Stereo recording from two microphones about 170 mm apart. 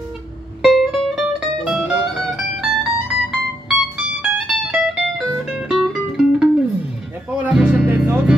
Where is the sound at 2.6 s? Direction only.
5° right (ahead or behind).